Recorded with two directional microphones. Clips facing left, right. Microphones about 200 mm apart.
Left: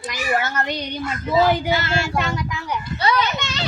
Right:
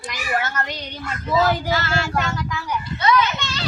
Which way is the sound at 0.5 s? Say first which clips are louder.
Left 4 dB; 20° left (ahead or behind).